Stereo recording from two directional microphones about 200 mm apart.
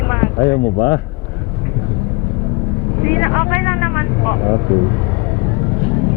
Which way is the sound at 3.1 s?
15° left (ahead or behind).